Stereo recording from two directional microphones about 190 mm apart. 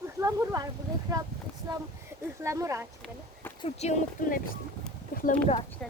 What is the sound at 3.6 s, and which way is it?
Speech, 35° left (ahead or behind).